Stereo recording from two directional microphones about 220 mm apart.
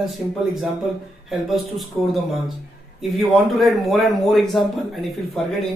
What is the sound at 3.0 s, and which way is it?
Speech, centre (ahead or behind).